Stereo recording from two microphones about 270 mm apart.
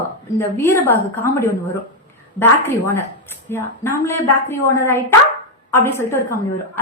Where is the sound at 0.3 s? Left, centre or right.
Centre.